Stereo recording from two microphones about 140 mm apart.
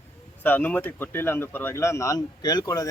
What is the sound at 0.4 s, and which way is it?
Speech, 15° left (ahead or behind).